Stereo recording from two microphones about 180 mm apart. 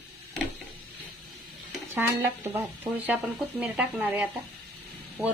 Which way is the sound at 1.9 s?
15° right (ahead or behind).